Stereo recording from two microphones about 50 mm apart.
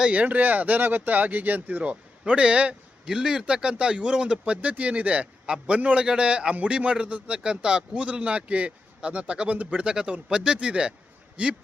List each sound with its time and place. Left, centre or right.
0.1 s speech: right
1.8 s a man's voice: right